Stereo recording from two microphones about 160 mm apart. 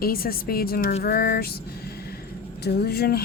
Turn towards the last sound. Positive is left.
turn(degrees=85)